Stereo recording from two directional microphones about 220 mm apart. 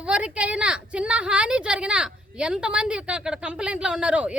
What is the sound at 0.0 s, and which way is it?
A woman's voice, 5° right (ahead or behind).